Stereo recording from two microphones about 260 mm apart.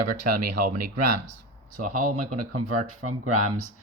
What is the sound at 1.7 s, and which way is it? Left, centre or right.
Speech, right.